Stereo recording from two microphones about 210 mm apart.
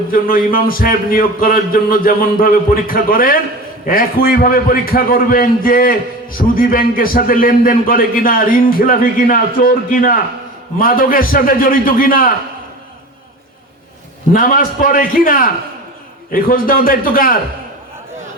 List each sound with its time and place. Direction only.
0.1 s a man's voice: 45° left (ahead or behind)
14.3 s a man's voice: 45° left (ahead or behind)